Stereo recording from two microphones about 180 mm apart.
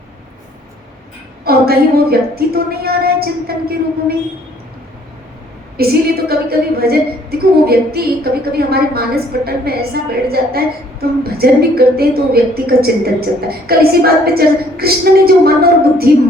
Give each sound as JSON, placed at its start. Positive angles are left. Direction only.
{"t": 1.5, "sound": "a woman's voice", "side_deg": -60}
{"t": 5.7, "sound": "a woman's voice", "side_deg": -60}